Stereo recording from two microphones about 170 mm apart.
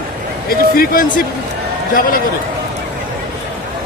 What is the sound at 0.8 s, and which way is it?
A man's voice, 55° left (ahead or behind).